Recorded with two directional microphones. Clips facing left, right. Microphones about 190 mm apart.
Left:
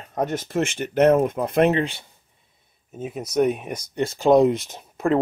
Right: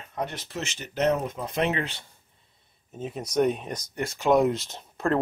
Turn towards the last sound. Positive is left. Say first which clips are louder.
# left 4 dB
turn(degrees=10)  # may be behind; listen again after turning